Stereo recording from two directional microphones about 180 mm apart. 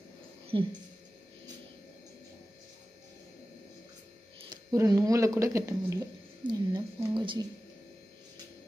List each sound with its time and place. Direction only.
0.5 s speech: 25° right (ahead or behind)
4.5 s speech: 20° right (ahead or behind)